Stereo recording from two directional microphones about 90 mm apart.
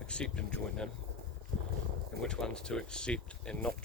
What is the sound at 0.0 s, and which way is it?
Speech, 10° left (ahead or behind).